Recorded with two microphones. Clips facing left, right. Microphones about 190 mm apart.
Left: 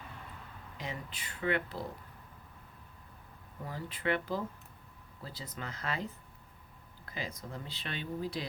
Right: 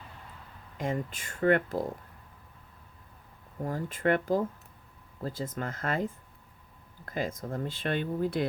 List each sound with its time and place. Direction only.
0.8 s speech: 50° right (ahead or behind)
3.6 s speech: 45° right (ahead or behind)